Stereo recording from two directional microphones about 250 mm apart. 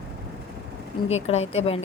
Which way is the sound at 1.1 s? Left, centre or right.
Left.